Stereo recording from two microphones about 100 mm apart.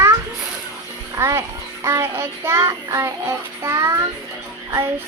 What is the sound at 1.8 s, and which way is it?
Child singing, 25° right (ahead or behind).